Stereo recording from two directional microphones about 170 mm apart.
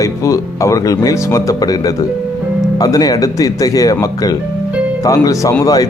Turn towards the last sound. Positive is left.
turn(degrees=20)  # may be behind; listen again after turning